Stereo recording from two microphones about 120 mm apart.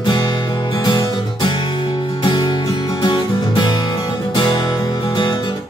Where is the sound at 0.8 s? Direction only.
40° left (ahead or behind).